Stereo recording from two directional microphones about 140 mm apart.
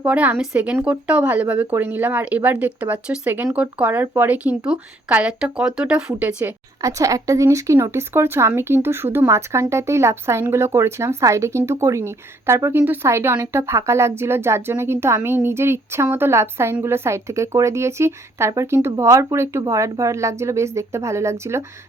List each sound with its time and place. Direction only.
0.0 s speech: 10° right (ahead or behind)
6.8 s speech: 25° right (ahead or behind)